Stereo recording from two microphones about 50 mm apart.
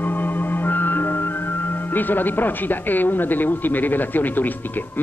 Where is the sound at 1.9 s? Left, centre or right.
Left.